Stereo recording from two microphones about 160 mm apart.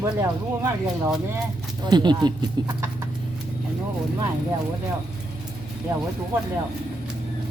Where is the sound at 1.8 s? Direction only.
25° right (ahead or behind).